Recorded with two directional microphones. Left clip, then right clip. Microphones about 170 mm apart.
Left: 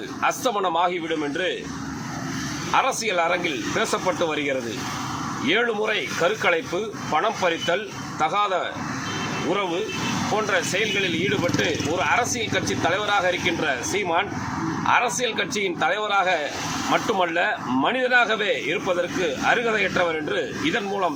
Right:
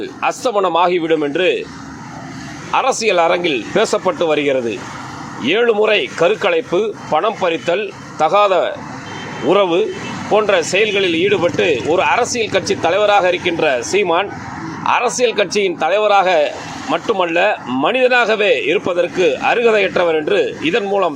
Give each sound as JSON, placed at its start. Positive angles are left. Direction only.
{"t": 0.2, "sound": "speech", "side_deg": -35}
{"t": 2.7, "sound": "speech", "side_deg": -35}